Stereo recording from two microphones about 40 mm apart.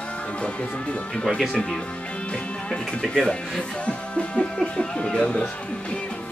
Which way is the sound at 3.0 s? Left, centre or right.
Centre.